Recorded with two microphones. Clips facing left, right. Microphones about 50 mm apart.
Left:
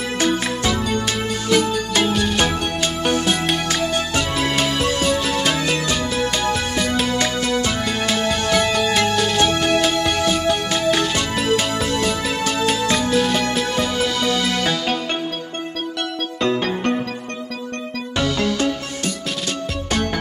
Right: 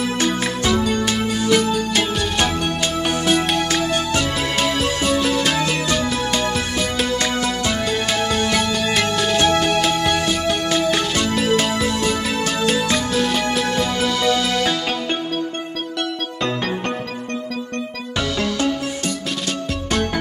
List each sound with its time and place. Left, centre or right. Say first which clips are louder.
0.7 s music: right 4 dB; centre